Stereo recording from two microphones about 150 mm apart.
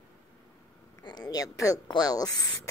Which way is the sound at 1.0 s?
25° left (ahead or behind).